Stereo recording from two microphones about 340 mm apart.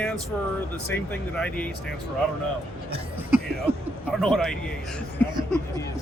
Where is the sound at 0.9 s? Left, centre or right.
Centre.